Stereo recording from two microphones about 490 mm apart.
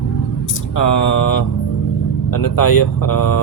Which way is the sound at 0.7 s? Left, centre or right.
Left.